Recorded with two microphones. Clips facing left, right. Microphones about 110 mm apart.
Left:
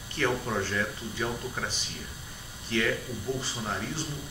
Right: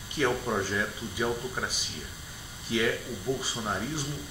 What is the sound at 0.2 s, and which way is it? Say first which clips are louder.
Speech: right 1 dB; 15° right (ahead or behind).